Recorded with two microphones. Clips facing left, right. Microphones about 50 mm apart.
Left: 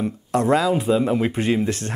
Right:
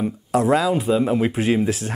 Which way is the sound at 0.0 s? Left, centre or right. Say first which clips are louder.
Right 1 dB; centre.